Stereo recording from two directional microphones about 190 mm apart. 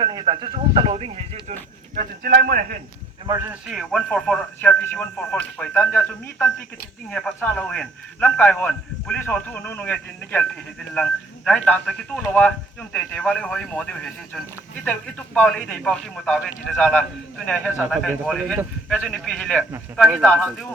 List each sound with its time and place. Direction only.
0.0 s speech: 25° right (ahead or behind)
2.0 s a man's voice: 50° right (ahead or behind)
3.2 s a man's voice: 15° right (ahead or behind)